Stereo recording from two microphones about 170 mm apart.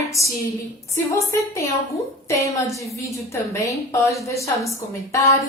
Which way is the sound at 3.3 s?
15° left (ahead or behind).